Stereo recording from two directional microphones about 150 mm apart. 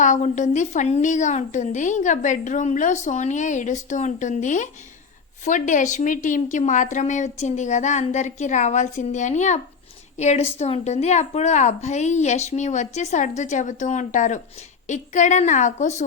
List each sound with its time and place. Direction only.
0.0 s a woman's voice: 55° left (ahead or behind)